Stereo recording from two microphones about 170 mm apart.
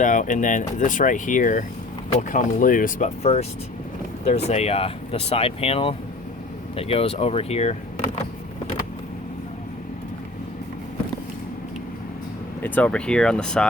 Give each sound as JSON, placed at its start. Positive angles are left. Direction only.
{"t": 0.0, "sound": "speech", "side_deg": 50}
{"t": 3.3, "sound": "speech", "side_deg": 40}
{"t": 12.6, "sound": "speech", "side_deg": 10}